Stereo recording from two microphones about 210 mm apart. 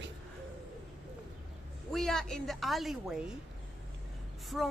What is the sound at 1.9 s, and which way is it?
Speech, centre (ahead or behind).